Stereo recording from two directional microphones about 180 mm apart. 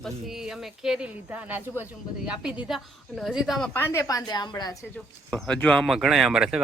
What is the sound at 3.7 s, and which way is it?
A woman's voice, 15° left (ahead or behind).